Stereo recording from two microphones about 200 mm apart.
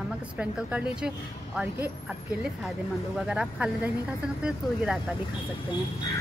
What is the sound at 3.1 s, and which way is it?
Speech, 5° right (ahead or behind).